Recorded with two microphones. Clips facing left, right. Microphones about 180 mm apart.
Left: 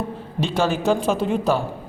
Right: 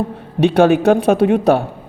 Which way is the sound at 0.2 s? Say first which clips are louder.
Right 11 dB; 65° right (ahead or behind).